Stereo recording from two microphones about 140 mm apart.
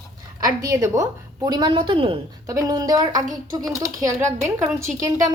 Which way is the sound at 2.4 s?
25° right (ahead or behind).